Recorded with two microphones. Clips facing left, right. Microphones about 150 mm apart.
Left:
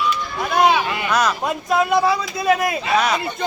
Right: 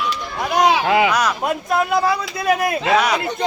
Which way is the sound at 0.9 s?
90° right.